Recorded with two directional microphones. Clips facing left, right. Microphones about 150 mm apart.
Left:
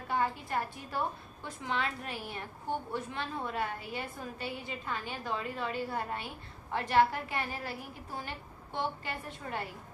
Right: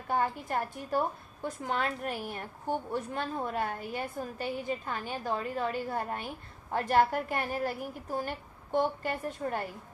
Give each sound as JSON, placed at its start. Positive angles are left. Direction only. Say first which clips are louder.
{"t": 0.1, "sound": "a woman's voice", "louder": "right 2 dB", "side_deg": -45}